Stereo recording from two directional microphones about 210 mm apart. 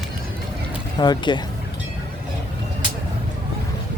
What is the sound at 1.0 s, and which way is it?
Speech, 20° left (ahead or behind).